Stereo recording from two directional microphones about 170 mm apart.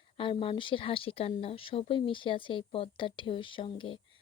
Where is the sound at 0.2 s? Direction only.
30° left (ahead or behind).